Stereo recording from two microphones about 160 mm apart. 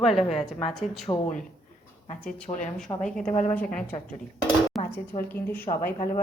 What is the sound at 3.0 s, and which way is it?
Speech, 5° left (ahead or behind).